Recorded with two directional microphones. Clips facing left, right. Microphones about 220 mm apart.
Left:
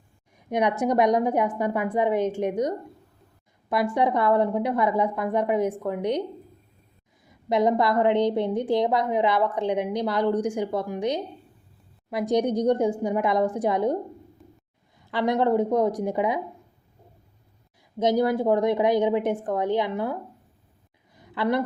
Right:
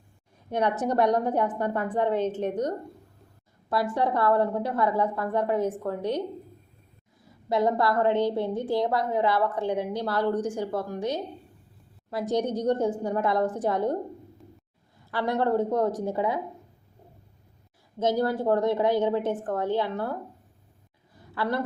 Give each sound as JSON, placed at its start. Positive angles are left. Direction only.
{"t": 0.3, "sound": "a woman's voice", "side_deg": 15}
{"t": 7.3, "sound": "a woman's voice", "side_deg": 15}
{"t": 15.1, "sound": "a woman's voice", "side_deg": 15}
{"t": 18.0, "sound": "a woman's voice", "side_deg": 15}
{"t": 21.2, "sound": "a sound", "side_deg": 15}